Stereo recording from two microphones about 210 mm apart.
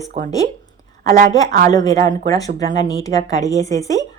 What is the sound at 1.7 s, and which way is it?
A woman's voice, 20° left (ahead or behind).